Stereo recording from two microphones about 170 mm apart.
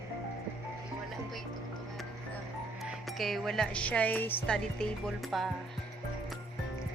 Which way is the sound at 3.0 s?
Centre (ahead or behind).